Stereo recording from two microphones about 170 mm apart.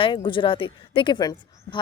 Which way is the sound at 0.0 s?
30° left (ahead or behind).